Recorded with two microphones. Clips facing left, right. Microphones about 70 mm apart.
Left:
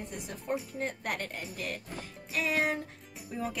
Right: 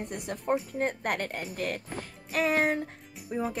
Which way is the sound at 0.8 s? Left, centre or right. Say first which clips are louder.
Right 5 dB; right.